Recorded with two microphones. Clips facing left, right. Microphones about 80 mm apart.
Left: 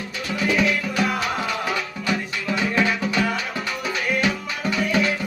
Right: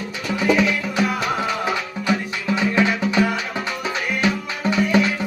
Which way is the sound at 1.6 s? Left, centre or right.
Right.